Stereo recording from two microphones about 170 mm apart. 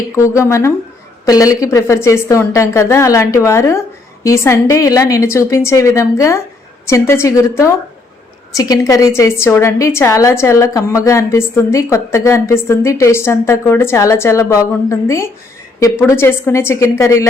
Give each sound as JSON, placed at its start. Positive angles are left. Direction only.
{"t": 0.2, "sound": "a woman's voice", "side_deg": 15}